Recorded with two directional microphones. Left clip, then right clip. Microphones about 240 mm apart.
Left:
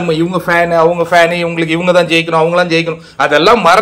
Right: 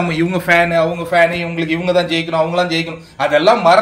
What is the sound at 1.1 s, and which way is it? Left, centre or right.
A man's voice, centre.